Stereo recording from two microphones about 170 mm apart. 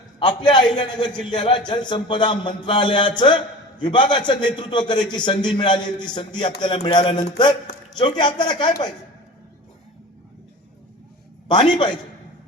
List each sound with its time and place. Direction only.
0.3 s a man's voice: 25° left (ahead or behind)
11.4 s a man's voice: 30° left (ahead or behind)